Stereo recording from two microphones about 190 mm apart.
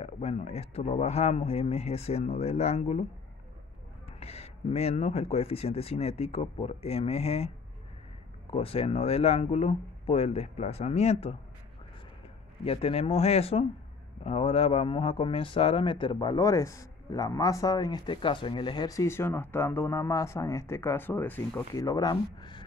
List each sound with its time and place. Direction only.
0.0 s speech: 35° left (ahead or behind)
4.2 s speech: 30° left (ahead or behind)
12.6 s speech: 30° left (ahead or behind)